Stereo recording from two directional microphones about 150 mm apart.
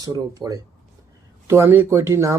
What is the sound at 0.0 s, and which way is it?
Speech, 25° right (ahead or behind).